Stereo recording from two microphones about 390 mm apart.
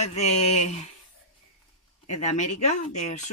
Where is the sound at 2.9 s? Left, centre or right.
Centre.